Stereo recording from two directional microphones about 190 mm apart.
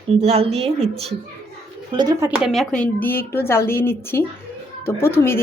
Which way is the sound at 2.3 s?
Centre (ahead or behind).